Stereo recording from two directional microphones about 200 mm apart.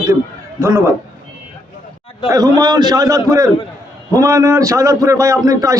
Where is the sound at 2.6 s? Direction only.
20° right (ahead or behind).